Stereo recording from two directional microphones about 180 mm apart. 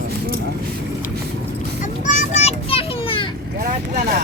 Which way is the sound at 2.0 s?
40° left (ahead or behind).